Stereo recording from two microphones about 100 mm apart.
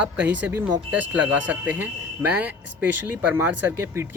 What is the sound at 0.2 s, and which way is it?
Speech, 15° right (ahead or behind).